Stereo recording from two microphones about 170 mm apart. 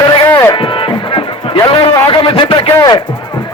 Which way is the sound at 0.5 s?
30° left (ahead or behind).